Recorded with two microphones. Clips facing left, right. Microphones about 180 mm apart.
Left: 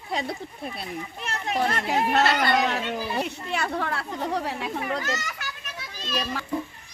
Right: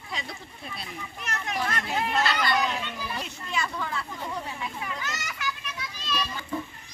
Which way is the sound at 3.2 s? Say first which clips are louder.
Left 5 dB; 60° left (ahead or behind).